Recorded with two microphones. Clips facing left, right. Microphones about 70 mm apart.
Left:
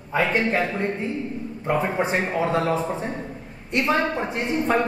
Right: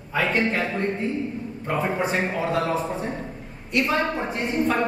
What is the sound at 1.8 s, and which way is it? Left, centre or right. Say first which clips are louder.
Speech: right 1 dB; left.